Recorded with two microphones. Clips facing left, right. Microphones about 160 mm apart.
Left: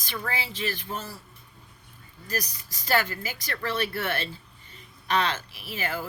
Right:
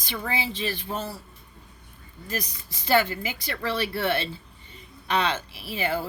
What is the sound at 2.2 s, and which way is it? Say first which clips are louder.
Speech: even; 25° right (ahead or behind).